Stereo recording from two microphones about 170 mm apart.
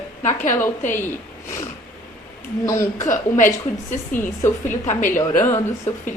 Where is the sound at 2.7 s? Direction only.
15° left (ahead or behind).